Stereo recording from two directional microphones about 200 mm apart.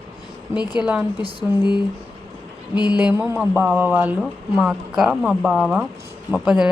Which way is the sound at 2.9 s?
5° right (ahead or behind).